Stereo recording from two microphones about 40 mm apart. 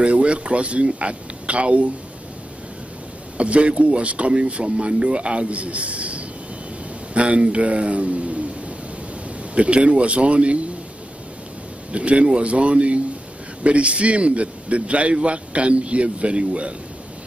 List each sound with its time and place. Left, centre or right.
0.0 s a man's voice: right
3.3 s a man's voice: right
11.9 s a man's voice: right